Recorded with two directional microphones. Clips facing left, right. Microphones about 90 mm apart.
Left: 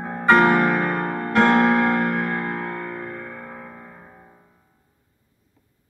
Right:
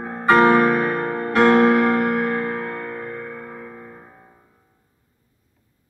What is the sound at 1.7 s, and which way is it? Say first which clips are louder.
Music: right 2 dB; 30° left (ahead or behind).